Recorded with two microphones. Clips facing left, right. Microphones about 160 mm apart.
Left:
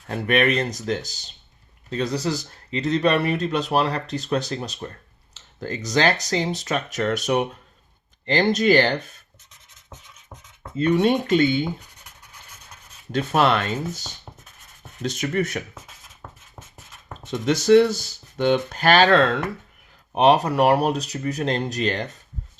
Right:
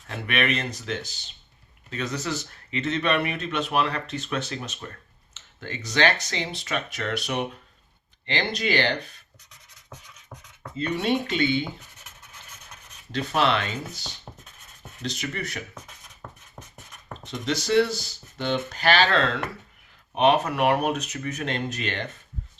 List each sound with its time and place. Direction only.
0.1 s speech: 40° left (ahead or behind)
10.8 s speech: 50° left (ahead or behind)
13.1 s speech: 50° left (ahead or behind)
16.2 s a sound: 5° left (ahead or behind)
17.3 s speech: 50° left (ahead or behind)
20.1 s speech: 40° left (ahead or behind)